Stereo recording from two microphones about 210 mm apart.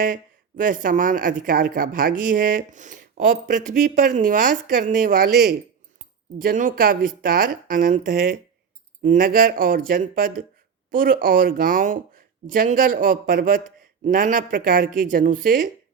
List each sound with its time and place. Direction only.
0.0 s speech: 40° right (ahead or behind)
6.4 s speech: 40° right (ahead or behind)
9.0 s speech: 40° right (ahead or behind)